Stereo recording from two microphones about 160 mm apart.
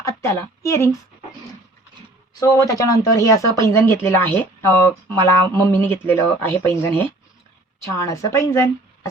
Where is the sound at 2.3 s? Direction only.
25° left (ahead or behind).